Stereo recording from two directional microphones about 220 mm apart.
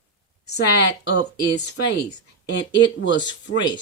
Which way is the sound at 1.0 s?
50° left (ahead or behind).